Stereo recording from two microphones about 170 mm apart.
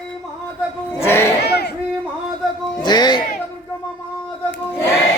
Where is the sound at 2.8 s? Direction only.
25° left (ahead or behind).